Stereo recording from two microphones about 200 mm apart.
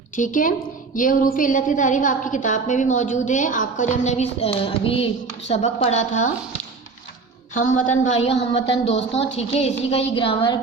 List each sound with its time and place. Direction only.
0.2 s a woman's voice: 40° left (ahead or behind)
7.5 s a woman's voice: 40° left (ahead or behind); by 10.6 s 25° left (ahead or behind)